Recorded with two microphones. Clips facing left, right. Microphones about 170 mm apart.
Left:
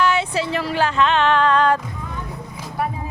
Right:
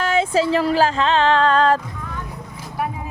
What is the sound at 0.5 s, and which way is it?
Speech, 35° right (ahead or behind).